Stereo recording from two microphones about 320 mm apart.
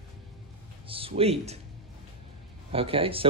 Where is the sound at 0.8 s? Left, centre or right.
Centre.